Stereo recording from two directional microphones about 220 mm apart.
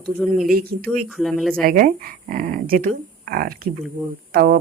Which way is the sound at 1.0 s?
Centre (ahead or behind).